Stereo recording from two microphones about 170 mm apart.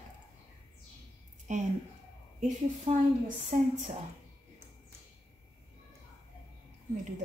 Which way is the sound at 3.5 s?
50° right (ahead or behind).